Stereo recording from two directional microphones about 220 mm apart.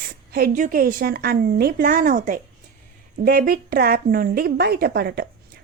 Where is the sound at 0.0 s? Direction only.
45° right (ahead or behind).